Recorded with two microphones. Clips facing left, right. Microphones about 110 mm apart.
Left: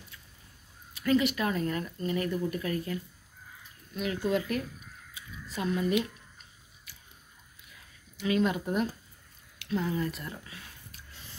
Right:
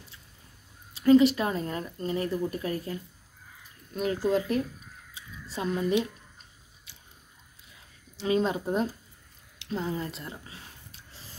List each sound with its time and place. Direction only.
0.9 s speech: 30° right (ahead or behind)
5.1 s squish: 30° right (ahead or behind)
6.9 s biting: 25° right (ahead or behind)
8.2 s speech: 30° right (ahead or behind)
9.6 s a sound: 30° right (ahead or behind)